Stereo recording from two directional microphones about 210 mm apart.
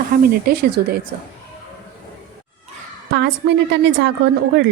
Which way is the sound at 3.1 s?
55° right (ahead or behind).